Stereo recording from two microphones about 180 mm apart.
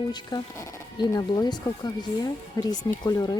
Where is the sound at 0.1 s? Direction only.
25° left (ahead or behind).